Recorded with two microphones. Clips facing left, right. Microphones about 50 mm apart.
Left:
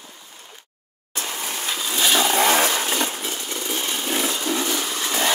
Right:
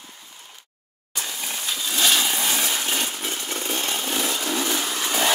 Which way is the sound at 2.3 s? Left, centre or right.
Left.